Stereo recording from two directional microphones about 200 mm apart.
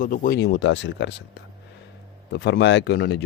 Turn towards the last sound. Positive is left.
turn(degrees=60)  # may be behind; listen again after turning